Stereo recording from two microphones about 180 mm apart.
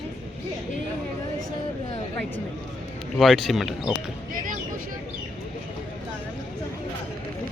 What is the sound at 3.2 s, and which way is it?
Speech, centre (ahead or behind).